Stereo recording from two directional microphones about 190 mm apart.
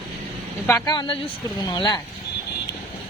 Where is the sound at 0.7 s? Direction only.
20° left (ahead or behind).